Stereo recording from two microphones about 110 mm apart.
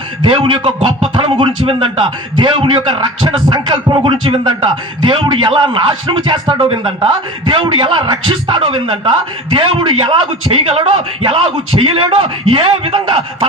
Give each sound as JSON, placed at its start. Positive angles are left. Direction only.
{"t": 0.2, "sound": "a man's voice", "side_deg": -45}